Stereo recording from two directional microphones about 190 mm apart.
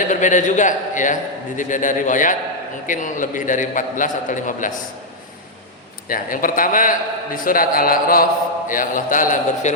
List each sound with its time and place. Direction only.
0.1 s mantra: 40° left (ahead or behind)
6.1 s mantra: 45° left (ahead or behind)